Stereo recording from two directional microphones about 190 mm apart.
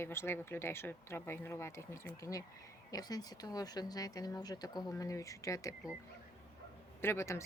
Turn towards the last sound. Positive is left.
turn(degrees=15)  # may be behind; listen again after turning